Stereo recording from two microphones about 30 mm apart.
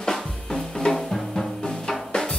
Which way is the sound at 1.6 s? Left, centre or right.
Left.